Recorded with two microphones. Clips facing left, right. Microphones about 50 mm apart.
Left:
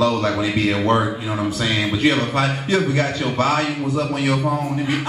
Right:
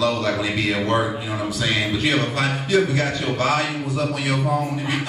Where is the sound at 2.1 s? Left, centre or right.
Left.